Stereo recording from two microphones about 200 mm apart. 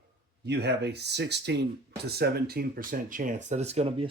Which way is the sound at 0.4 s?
55° right (ahead or behind).